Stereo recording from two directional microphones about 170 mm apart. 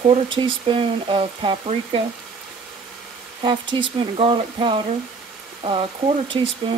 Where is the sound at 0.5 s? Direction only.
30° right (ahead or behind).